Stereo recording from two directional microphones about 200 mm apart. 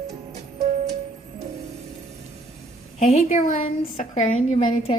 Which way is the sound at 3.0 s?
30° left (ahead or behind).